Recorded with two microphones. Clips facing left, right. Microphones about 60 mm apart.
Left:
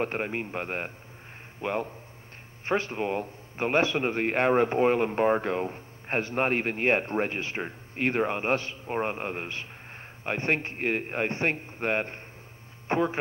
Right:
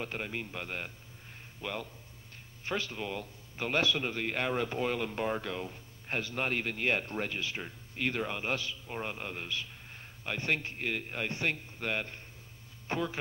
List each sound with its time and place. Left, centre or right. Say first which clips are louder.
0.0 s a man's voice: left 8 dB; left